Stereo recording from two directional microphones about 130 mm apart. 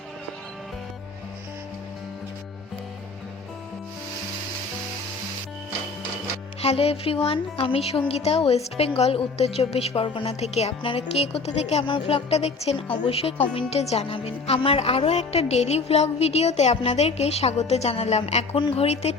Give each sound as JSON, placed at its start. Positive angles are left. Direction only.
{"t": 6.6, "sound": "a woman's voice", "side_deg": 50}
{"t": 11.9, "sound": "a woman's voice", "side_deg": 45}
{"t": 18.5, "sound": "a woman's voice", "side_deg": 45}